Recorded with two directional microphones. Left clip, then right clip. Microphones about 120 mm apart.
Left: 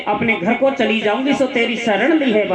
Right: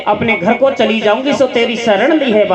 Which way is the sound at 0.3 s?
35° right (ahead or behind).